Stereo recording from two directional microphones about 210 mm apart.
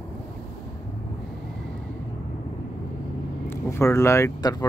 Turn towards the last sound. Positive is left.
turn(degrees=20)  # may be behind; listen again after turning